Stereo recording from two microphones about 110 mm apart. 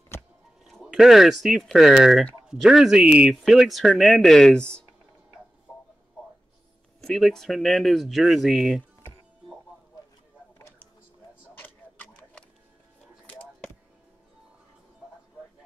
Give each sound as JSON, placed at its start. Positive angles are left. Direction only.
{"t": 0.7, "sound": "speech", "side_deg": 0}
{"t": 7.0, "sound": "speech", "side_deg": 0}
{"t": 11.5, "sound": "tick-tock", "side_deg": 20}